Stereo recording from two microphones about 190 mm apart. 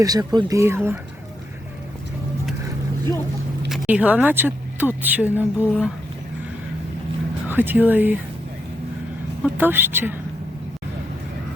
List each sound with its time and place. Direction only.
0.0 s speech: 20° right (ahead or behind)
3.7 s a woman's voice: 5° right (ahead or behind)
7.4 s a woman's voice: 10° right (ahead or behind)
9.4 s a woman's voice: 10° right (ahead or behind)